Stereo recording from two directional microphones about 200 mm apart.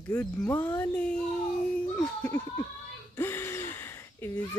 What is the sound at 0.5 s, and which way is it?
Speech, 10° left (ahead or behind).